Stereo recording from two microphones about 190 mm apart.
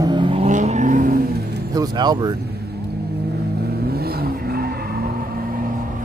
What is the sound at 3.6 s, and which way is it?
Vehicle, 55° right (ahead or behind).